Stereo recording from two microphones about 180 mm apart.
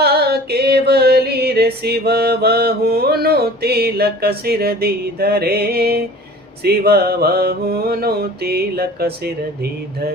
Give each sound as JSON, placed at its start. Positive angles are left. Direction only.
{"t": 0.0, "sound": "music", "side_deg": -65}